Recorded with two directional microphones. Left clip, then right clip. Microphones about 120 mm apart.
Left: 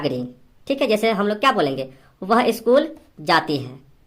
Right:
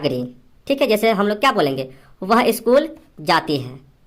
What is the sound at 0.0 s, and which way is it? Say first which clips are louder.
A woman's voice: right 2 dB; 25° right (ahead or behind).